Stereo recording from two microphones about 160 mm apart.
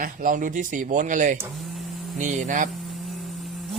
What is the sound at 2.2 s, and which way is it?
Speech, 50° right (ahead or behind).